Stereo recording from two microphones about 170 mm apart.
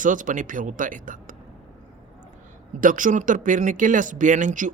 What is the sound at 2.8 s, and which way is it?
Speech, 50° right (ahead or behind).